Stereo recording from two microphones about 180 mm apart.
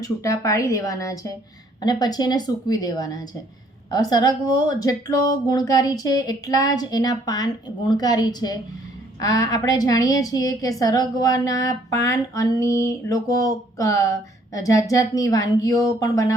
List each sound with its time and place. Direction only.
0.0 s a woman's voice: 20° left (ahead or behind)